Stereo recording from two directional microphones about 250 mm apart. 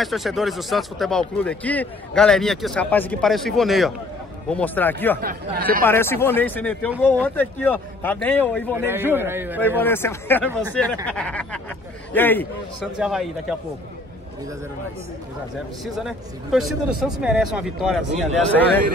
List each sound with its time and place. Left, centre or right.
0.0 s a man's voice: centre
5.2 s speech: right
5.9 s a man's voice: centre
8.7 s a man's voice: centre
9.8 s a man's voice: centre
15.8 s speech: centre